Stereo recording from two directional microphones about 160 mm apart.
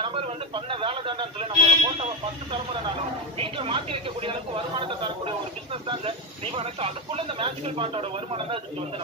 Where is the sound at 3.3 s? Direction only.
35° right (ahead or behind).